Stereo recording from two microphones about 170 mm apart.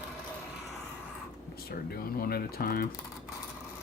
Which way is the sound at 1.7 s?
60° left (ahead or behind).